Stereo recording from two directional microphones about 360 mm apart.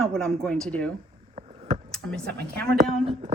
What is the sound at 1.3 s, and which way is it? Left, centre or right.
Vehicle, centre.